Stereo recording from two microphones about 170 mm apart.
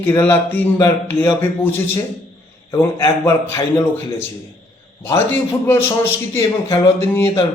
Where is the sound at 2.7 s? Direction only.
15° left (ahead or behind).